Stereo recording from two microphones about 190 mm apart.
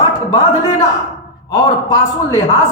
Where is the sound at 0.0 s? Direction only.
15° left (ahead or behind).